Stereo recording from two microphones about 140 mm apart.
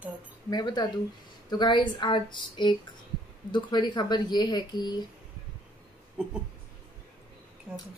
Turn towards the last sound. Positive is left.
turn(degrees=-10)  # may be behind; listen again after turning